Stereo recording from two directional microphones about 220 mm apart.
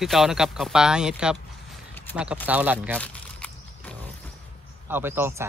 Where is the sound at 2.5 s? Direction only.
5° right (ahead or behind).